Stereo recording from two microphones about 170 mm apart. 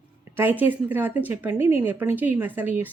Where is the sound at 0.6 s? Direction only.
10° right (ahead or behind).